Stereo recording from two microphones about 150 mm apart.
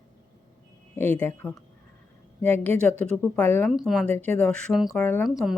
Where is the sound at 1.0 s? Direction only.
15° left (ahead or behind).